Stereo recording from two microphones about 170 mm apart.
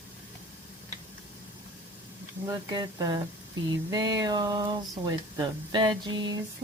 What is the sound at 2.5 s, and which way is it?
Speech, 20° right (ahead or behind).